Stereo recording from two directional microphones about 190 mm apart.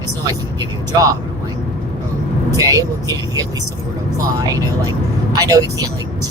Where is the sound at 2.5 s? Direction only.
15° right (ahead or behind).